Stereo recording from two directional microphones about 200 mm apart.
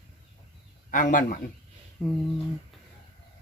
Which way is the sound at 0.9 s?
40° left (ahead or behind).